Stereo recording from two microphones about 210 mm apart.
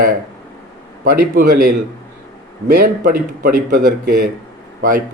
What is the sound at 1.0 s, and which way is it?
Speech, 40° right (ahead or behind).